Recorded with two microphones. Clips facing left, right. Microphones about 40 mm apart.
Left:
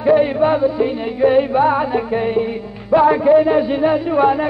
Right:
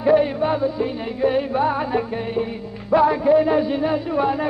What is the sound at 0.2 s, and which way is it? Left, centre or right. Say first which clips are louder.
Music: left 5 dB; left.